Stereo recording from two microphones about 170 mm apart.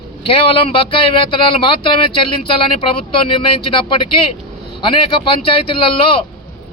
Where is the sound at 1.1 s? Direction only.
30° left (ahead or behind).